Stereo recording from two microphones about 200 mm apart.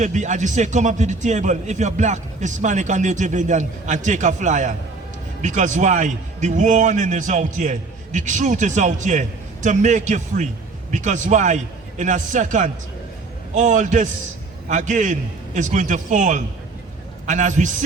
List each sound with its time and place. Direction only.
0.0 s a man's voice: 35° right (ahead or behind)